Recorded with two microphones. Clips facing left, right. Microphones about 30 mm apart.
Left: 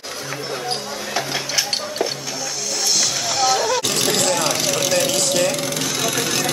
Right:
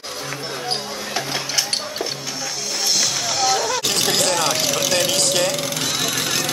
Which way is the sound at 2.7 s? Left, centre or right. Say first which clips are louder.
Even; centre.